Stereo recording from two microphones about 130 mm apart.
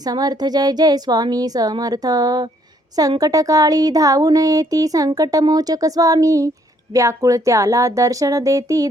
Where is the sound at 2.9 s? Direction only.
30° right (ahead or behind).